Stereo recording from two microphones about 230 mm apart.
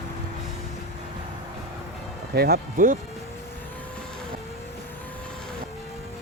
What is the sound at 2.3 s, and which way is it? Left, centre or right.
Speech, right.